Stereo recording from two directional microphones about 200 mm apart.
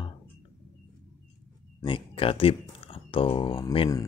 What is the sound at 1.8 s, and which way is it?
Speech, 25° left (ahead or behind).